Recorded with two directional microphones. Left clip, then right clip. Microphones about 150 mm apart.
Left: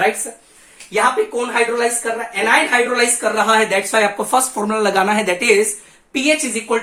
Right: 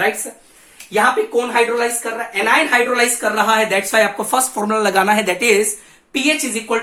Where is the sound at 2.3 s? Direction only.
10° right (ahead or behind).